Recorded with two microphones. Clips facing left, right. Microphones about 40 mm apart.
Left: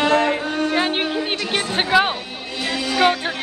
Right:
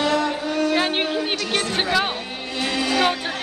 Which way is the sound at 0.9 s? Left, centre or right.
Centre.